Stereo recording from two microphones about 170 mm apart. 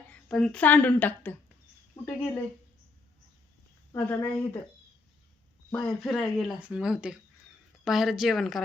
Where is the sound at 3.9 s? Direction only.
15° left (ahead or behind).